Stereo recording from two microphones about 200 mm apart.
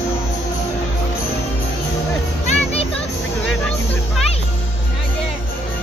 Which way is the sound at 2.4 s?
30° left (ahead or behind).